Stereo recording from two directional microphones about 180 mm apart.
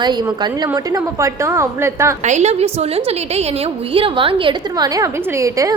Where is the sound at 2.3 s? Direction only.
40° right (ahead or behind); by 5.8 s 15° right (ahead or behind).